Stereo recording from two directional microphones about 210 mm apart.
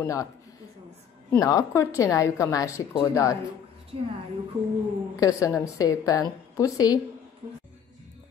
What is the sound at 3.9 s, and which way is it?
Speech, 25° right (ahead or behind).